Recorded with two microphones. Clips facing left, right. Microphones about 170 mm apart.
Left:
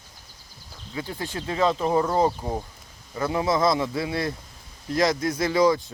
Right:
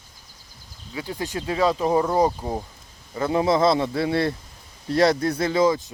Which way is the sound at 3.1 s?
25° right (ahead or behind).